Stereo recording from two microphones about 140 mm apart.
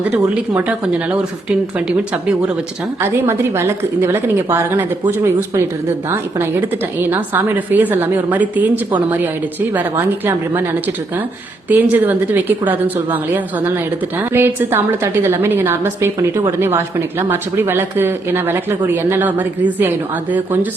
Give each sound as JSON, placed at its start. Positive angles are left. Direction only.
{"t": 0.5, "sound": "a woman's voice", "side_deg": -10}
{"t": 3.0, "sound": "a woman's voice", "side_deg": -15}